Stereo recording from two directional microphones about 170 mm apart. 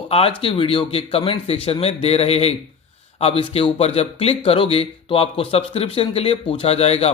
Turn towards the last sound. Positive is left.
turn(degrees=35)  # may be behind; listen again after turning